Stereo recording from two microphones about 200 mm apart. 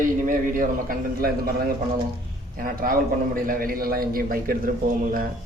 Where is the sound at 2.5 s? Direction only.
45° right (ahead or behind).